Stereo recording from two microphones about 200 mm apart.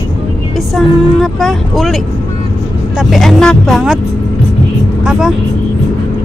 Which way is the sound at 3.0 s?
Centre (ahead or behind).